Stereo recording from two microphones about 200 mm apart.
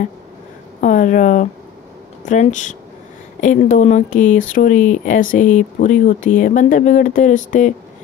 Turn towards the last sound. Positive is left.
turn(degrees=40)  # may be behind; listen again after turning